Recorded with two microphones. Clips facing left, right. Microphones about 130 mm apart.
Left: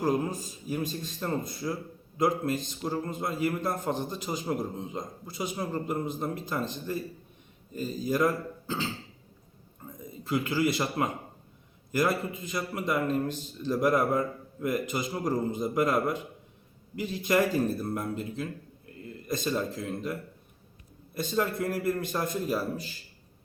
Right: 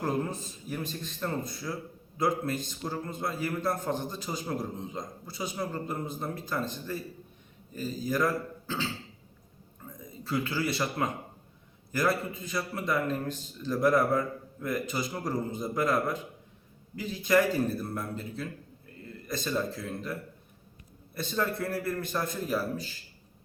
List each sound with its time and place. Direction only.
0.0 s a man's voice: 10° left (ahead or behind)
8.0 s a man's voice: 20° left (ahead or behind)
9.8 s a man's voice: 20° left (ahead or behind)
19.5 s speech: 15° left (ahead or behind)
21.2 s a man's voice: 15° left (ahead or behind)